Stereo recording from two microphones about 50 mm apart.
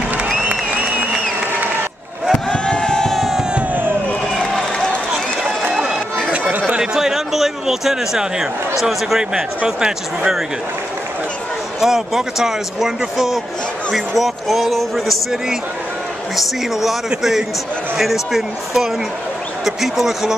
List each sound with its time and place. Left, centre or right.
2.3 s crowd: centre
4.4 s a sound: centre
6.8 s a sound: centre
8.8 s speech: centre
11.8 s speech: centre
17.2 s speech: centre